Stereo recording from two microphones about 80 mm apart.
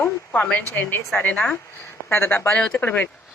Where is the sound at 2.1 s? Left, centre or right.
Left.